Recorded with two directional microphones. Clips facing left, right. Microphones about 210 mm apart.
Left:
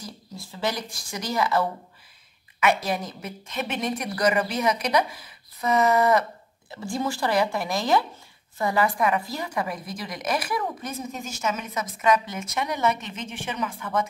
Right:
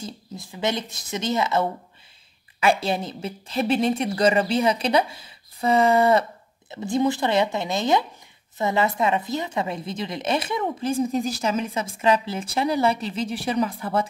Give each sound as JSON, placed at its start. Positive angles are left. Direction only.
{"t": 0.0, "sound": "a woman's voice", "side_deg": -20}